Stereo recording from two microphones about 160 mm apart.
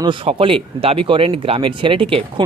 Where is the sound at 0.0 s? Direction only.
30° right (ahead or behind).